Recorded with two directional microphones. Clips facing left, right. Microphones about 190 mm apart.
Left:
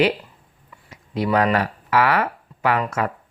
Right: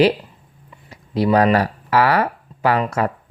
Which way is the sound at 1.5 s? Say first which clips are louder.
Right 3 dB; 35° right (ahead or behind).